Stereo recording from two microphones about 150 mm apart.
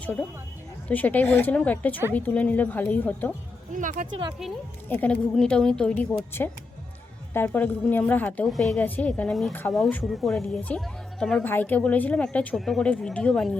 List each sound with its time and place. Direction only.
0.0 s speech: 10° left (ahead or behind)
3.7 s speech: 60° right (ahead or behind)
4.9 s speech: 10° left (ahead or behind)
10.1 s speech: centre (ahead or behind)